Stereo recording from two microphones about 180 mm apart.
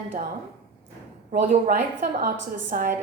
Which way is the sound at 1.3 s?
45° right (ahead or behind).